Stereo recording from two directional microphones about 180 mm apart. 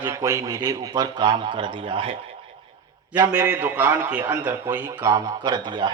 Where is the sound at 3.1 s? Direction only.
15° right (ahead or behind).